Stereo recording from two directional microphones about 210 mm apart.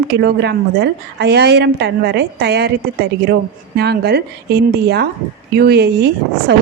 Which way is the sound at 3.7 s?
50° right (ahead or behind).